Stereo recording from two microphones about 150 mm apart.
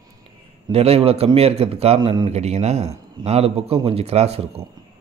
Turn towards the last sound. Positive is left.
turn(degrees=-45)  # may be behind; listen again after turning